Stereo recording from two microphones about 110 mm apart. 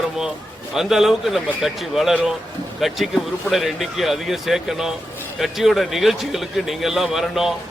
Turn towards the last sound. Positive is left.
turn(degrees=0)  # may be behind; listen again after turning